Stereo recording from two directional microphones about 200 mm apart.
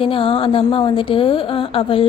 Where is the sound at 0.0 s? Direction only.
25° left (ahead or behind).